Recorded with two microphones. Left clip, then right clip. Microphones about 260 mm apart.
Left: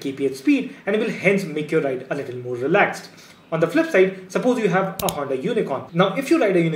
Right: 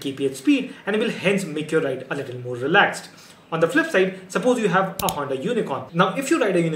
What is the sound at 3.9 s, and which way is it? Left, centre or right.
Speech, centre.